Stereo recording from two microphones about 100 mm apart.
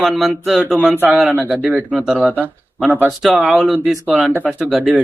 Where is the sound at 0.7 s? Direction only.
15° right (ahead or behind).